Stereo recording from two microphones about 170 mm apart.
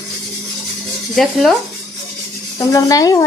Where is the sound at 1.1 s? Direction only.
Centre (ahead or behind).